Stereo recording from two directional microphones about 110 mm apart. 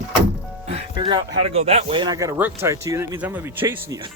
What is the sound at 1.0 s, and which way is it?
Speech, 45° right (ahead or behind).